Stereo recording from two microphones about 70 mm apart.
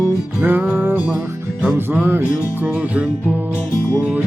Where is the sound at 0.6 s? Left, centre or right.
Right.